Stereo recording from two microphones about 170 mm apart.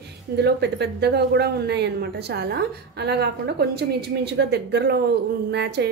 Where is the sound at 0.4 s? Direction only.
75° right (ahead or behind).